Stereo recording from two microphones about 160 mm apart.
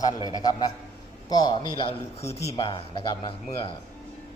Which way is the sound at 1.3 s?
25° left (ahead or behind).